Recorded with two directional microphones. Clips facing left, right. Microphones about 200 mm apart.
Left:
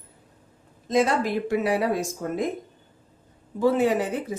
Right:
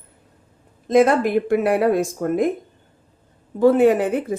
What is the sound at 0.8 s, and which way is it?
Speech, 55° right (ahead or behind).